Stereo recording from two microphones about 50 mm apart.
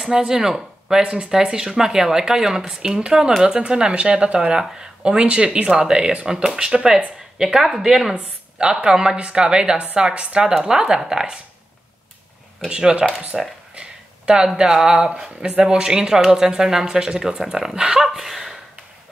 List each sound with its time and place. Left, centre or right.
0.0 s speech: centre
12.6 s speech: centre
13.3 s a sound: centre
14.6 s speech: centre